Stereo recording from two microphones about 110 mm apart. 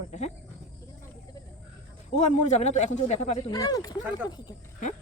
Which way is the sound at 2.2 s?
90° left.